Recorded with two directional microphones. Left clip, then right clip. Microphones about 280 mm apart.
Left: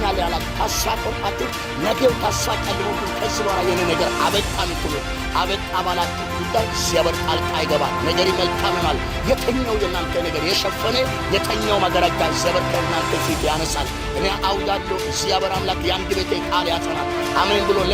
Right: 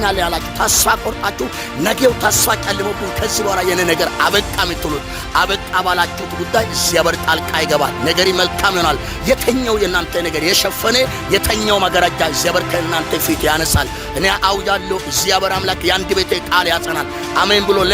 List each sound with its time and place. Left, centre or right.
0.0 s speech: right
2.0 s music: right
4.2 s music: right
10.3 s music: right
14.2 s music: right